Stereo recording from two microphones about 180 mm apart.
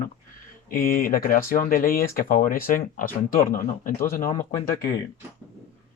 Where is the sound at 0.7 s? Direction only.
50° left (ahead or behind).